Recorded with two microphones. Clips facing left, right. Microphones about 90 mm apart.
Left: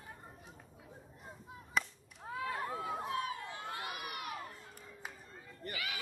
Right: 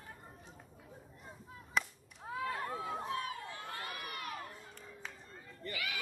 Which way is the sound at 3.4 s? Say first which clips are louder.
Left 2 dB; 20° left (ahead or behind).